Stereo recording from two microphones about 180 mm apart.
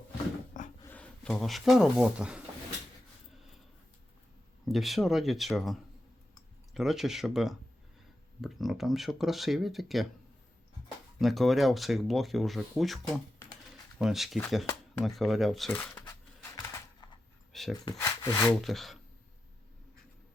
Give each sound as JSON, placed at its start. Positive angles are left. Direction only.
{"t": 0.9, "sound": "speech", "side_deg": 5}
{"t": 4.6, "sound": "speech", "side_deg": 0}
{"t": 6.7, "sound": "speech", "side_deg": 0}
{"t": 11.2, "sound": "speech", "side_deg": 0}
{"t": 14.0, "sound": "speech", "side_deg": 0}
{"t": 15.0, "sound": "a sound", "side_deg": 0}
{"t": 17.5, "sound": "dog", "side_deg": 0}
{"t": 17.8, "sound": "speech", "side_deg": 20}
{"t": 18.6, "sound": "speech", "side_deg": 0}